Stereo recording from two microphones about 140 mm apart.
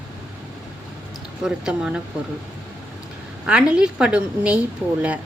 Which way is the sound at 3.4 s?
10° right (ahead or behind).